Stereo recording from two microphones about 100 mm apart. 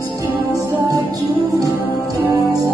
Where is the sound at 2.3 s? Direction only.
40° right (ahead or behind).